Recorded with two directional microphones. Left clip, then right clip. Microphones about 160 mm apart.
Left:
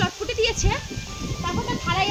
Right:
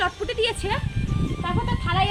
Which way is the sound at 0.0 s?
5° right (ahead or behind).